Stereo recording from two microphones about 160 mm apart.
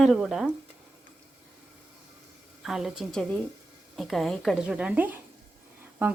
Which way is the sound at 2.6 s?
Centre (ahead or behind).